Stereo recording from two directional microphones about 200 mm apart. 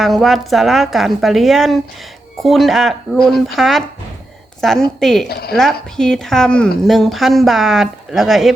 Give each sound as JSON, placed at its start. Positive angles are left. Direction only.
{"t": 0.0, "sound": "speech", "side_deg": 0}
{"t": 5.3, "sound": "a woman's voice", "side_deg": 50}
{"t": 5.5, "sound": "speech", "side_deg": 0}